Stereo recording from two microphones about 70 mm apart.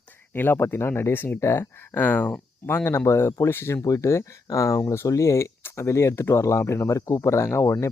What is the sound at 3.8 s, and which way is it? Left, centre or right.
Speech, left.